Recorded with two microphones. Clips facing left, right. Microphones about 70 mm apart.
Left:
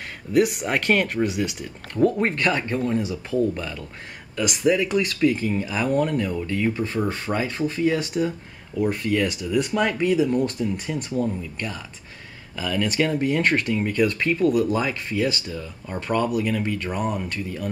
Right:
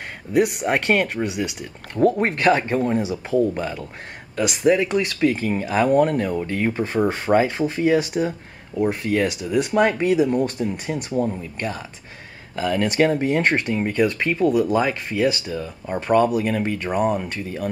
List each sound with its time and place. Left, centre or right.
0.3 s speech: centre; by 17.6 s right